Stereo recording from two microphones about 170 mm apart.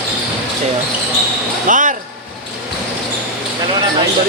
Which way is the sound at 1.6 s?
50° right (ahead or behind).